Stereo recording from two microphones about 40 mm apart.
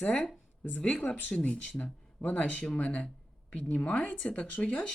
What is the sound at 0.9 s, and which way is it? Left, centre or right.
Speech, left.